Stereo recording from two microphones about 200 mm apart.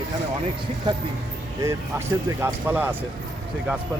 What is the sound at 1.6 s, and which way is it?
Speech, 15° right (ahead or behind).